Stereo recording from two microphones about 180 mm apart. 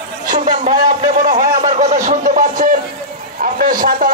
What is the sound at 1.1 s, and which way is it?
A man's voice, 45° right (ahead or behind).